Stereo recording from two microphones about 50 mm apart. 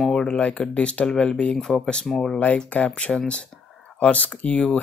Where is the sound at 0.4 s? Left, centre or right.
Left.